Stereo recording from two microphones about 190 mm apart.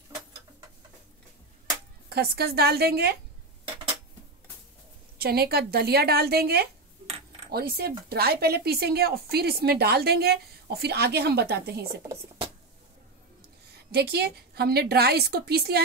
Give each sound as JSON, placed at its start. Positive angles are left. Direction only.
{"t": 2.0, "sound": "a woman's voice", "side_deg": -55}
{"t": 5.2, "sound": "a woman's voice", "side_deg": -55}
{"t": 13.9, "sound": "a woman's voice", "side_deg": -60}